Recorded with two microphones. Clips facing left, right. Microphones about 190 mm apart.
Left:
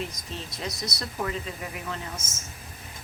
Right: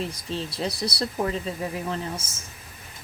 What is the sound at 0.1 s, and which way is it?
A woman's voice, 30° right (ahead or behind).